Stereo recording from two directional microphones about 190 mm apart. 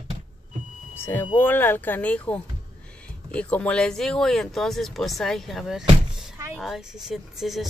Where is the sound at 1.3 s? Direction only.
10° left (ahead or behind).